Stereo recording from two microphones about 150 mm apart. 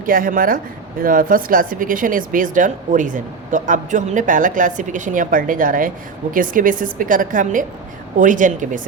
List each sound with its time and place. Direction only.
0.0 s speech: 70° right (ahead or behind)